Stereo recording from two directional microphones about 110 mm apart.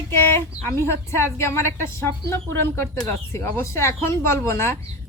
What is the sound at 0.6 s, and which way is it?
Speech, 25° left (ahead or behind).